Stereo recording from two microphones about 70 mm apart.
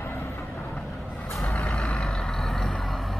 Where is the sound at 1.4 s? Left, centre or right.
Centre.